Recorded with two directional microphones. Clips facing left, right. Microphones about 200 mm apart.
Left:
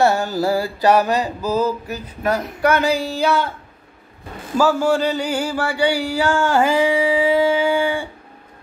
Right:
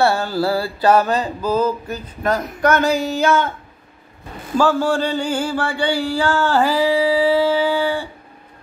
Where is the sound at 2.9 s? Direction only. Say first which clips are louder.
Right 3 dB; 30° left (ahead or behind).